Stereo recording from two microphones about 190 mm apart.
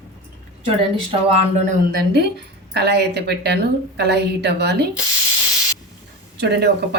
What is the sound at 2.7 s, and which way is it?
Speech, 60° right (ahead or behind).